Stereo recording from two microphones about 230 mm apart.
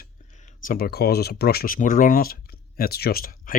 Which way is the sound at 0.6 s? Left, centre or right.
Left.